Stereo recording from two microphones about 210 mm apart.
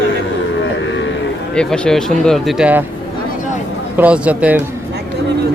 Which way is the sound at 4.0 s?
5° right (ahead or behind).